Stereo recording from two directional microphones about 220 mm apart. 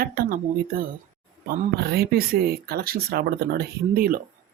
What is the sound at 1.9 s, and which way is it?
Speech, 45° right (ahead or behind).